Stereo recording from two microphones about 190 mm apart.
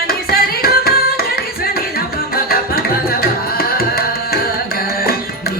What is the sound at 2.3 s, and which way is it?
Tabla, 50° left (ahead or behind).